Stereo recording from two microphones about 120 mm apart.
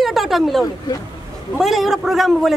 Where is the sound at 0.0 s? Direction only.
Centre (ahead or behind).